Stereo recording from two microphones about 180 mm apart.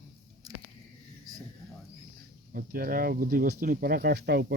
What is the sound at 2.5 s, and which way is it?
Speech, 55° right (ahead or behind).